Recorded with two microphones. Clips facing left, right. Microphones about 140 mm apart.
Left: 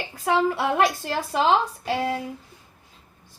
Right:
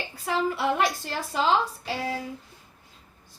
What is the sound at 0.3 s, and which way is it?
Speech, 60° left (ahead or behind).